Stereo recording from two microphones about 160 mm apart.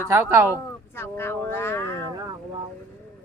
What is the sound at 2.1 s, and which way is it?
Speech, 25° right (ahead or behind).